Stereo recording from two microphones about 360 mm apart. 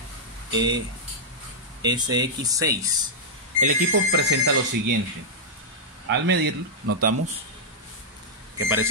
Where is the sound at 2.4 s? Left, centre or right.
Centre.